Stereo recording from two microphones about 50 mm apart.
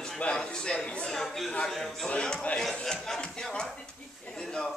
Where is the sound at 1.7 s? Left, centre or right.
Centre.